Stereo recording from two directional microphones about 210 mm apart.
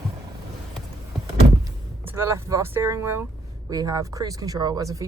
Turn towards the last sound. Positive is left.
turn(degrees=-15)  # may be behind; listen again after turning